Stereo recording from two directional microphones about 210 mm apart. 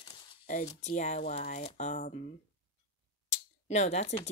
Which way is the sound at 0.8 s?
35° left (ahead or behind).